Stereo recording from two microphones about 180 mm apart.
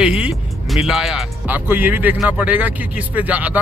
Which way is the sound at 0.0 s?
5° right (ahead or behind).